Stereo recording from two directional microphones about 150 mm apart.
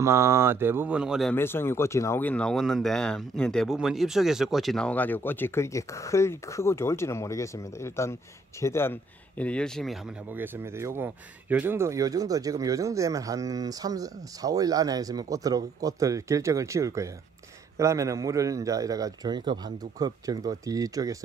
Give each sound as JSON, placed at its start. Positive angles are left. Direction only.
{"t": 0.0, "sound": "a sound", "side_deg": -20}
{"t": 1.3, "sound": "speech", "side_deg": 15}
{"t": 9.4, "sound": "speech", "side_deg": 5}
{"t": 10.3, "sound": "speech", "side_deg": -15}